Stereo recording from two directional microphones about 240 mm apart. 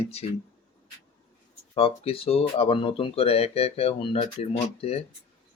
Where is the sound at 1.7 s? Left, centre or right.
Left.